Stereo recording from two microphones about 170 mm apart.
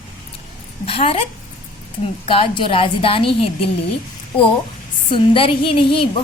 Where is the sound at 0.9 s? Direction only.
35° left (ahead or behind).